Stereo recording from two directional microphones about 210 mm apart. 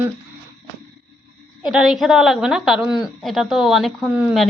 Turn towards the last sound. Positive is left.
turn(degrees=-5)  # may be behind; listen again after turning